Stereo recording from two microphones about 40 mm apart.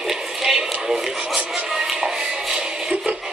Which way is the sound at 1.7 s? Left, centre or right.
Centre.